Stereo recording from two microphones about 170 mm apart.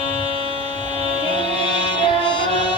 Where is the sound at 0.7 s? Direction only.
30° left (ahead or behind).